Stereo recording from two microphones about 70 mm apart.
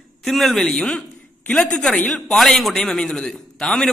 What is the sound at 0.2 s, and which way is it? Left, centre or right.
A man's voice, centre.